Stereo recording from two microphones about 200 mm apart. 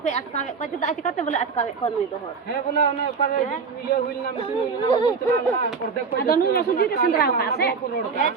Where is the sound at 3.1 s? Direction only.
45° left (ahead or behind).